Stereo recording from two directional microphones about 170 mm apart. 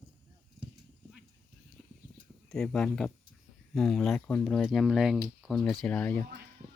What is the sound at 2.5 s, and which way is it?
Speech, 5° left (ahead or behind).